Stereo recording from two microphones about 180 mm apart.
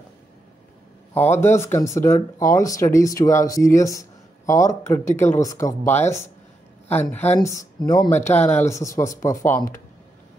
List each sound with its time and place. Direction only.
1.1 s speech: 15° left (ahead or behind)